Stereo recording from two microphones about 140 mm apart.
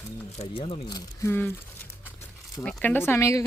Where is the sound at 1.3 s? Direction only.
15° left (ahead or behind).